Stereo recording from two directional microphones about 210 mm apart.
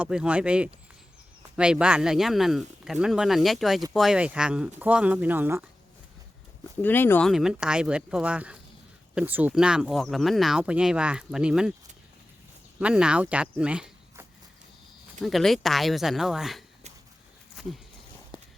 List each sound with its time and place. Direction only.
0.0 s speech: 5° right (ahead or behind)
6.8 s speech: 10° left (ahead or behind)
12.8 s speech: 5° right (ahead or behind)